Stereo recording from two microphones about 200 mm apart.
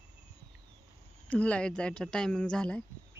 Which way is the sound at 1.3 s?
5° left (ahead or behind).